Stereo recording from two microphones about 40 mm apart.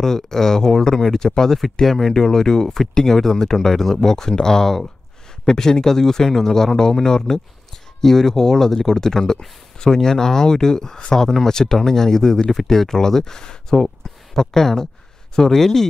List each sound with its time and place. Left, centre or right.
0.0 s speech: centre